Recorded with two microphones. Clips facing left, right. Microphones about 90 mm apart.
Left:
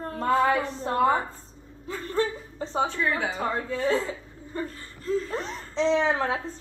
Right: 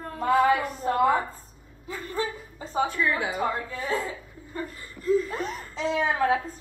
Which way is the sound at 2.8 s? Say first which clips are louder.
Right 1 dB; 30° left (ahead or behind).